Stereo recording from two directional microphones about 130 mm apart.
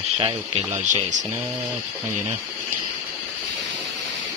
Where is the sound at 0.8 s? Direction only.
70° right (ahead or behind).